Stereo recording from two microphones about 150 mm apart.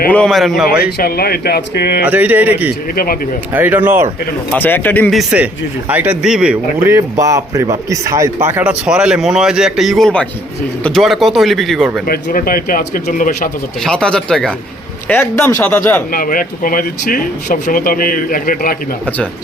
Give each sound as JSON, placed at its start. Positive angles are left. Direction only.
{"t": 0.1, "sound": "speech", "side_deg": 5}
{"t": 0.8, "sound": "speech", "side_deg": 90}
{"t": 2.0, "sound": "a man's voice", "side_deg": -10}
{"t": 2.9, "sound": "speech", "side_deg": 75}
{"t": 3.5, "sound": "a man's voice", "side_deg": -10}
{"t": 4.5, "sound": "speech", "side_deg": 10}
{"t": 5.1, "sound": "a man's voice", "side_deg": -5}
{"t": 6.7, "sound": "a man's voice", "side_deg": -20}
{"t": 12.0, "sound": "speech", "side_deg": 80}
{"t": 13.8, "sound": "speech", "side_deg": 5}
{"t": 16.1, "sound": "speech", "side_deg": 70}